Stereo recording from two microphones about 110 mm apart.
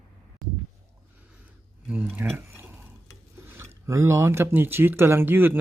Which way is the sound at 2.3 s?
20° right (ahead or behind).